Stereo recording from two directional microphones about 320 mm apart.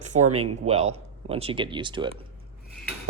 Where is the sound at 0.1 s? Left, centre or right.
Right.